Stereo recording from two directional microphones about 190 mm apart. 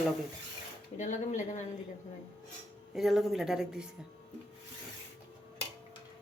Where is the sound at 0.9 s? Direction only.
40° left (ahead or behind).